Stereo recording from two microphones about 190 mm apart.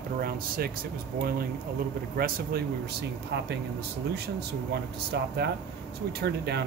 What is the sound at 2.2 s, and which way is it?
Speech, 55° right (ahead or behind).